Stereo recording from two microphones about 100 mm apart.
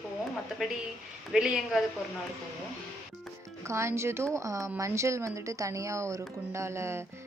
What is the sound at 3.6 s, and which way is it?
Speech, 30° right (ahead or behind).